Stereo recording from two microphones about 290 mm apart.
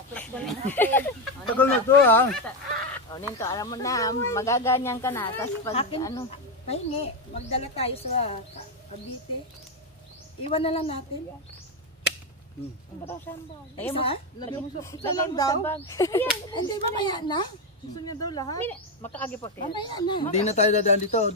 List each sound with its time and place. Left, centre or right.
0.1 s a woman's voice: centre
5.7 s speech: centre
10.5 s speech: centre
13.9 s a woman's voice: centre
19.4 s speech: centre